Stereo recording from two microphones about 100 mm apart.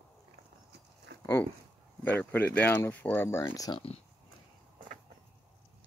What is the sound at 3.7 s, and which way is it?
Speech, 80° left.